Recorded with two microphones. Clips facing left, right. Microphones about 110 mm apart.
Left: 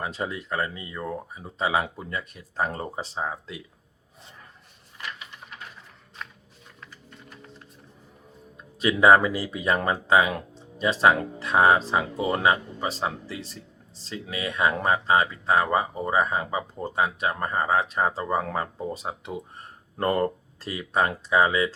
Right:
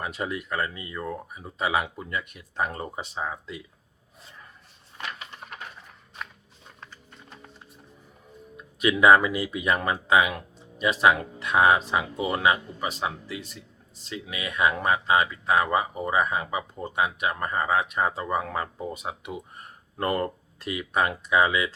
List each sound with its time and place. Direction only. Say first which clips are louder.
0.0 s speech: even; 30° left (ahead or behind)
8.5 s speech: even; 35° left (ahead or behind)